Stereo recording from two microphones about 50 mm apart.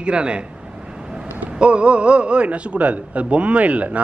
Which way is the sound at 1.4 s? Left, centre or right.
Right.